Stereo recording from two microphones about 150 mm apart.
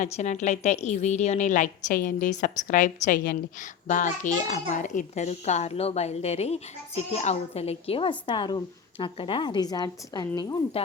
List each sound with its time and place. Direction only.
0.0 s a woman's voice: 50° left (ahead or behind); by 10.6 s 25° left (ahead or behind)